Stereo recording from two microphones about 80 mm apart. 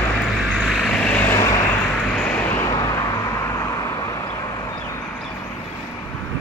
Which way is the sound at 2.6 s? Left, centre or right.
Left.